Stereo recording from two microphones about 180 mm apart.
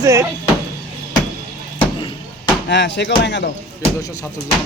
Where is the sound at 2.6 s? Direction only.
75° left (ahead or behind).